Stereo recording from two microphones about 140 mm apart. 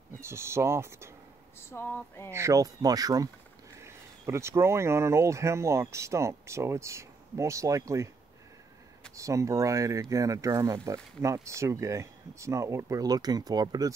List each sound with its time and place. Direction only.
0.2 s speech: 20° right (ahead or behind)
1.7 s a sound: 15° left (ahead or behind)
2.3 s speech: 20° right (ahead or behind)
9.1 s speech: 20° right (ahead or behind)